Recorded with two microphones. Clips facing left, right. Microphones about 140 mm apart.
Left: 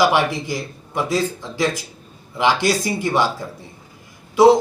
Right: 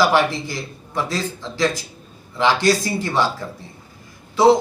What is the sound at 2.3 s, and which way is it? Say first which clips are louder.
Speech: right 1 dB; 15° left (ahead or behind).